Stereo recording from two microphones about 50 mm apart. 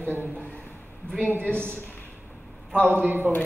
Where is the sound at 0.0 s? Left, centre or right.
Right.